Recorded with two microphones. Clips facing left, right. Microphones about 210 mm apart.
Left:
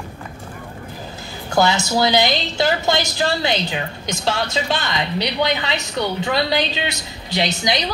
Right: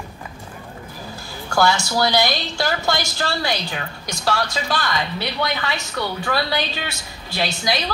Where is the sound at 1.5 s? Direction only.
20° left (ahead or behind).